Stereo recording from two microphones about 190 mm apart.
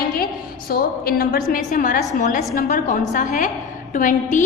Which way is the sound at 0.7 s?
50° left (ahead or behind).